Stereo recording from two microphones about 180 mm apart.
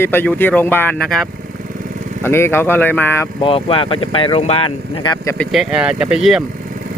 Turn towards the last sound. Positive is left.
turn(degrees=-5)  # may be behind; listen again after turning